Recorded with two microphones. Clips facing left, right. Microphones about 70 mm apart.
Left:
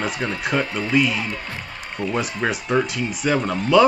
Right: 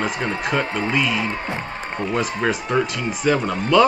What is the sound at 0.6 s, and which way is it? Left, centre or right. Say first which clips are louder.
Speech: right 2 dB; right.